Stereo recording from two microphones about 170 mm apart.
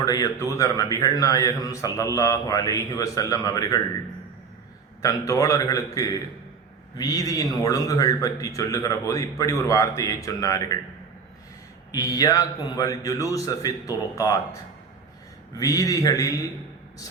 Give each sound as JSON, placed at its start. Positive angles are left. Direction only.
{"t": 0.0, "sound": "a man's voice", "side_deg": 20}
{"t": 5.0, "sound": "a man's voice", "side_deg": 20}
{"t": 11.9, "sound": "a man's voice", "side_deg": 20}
{"t": 15.5, "sound": "a man's voice", "side_deg": 20}